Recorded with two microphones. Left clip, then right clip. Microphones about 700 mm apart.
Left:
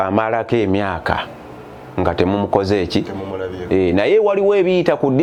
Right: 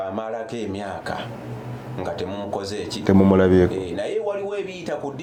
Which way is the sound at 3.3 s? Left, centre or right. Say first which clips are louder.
Right 8 dB; right.